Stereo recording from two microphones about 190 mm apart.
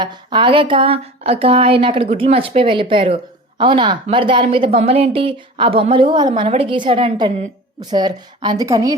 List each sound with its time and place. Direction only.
0.0 s speech: 25° right (ahead or behind)